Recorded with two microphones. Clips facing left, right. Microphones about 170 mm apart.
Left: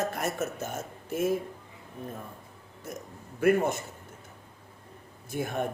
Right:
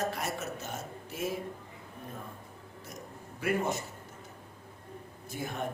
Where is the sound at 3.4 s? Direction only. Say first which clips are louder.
Left 7 dB; 50° left (ahead or behind).